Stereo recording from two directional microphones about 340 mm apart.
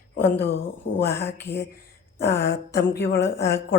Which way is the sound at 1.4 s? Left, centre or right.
Left.